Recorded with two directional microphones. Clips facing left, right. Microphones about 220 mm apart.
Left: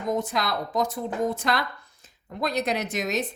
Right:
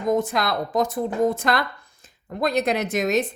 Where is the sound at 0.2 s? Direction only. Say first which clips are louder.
Right 4 dB; 50° right (ahead or behind).